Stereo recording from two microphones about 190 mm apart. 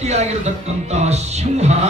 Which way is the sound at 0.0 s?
35° right (ahead or behind).